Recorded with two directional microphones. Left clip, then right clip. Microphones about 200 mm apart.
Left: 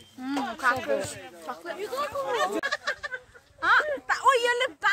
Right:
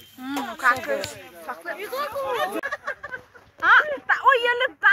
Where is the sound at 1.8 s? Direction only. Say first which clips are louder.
Right 1 dB; 65° left (ahead or behind).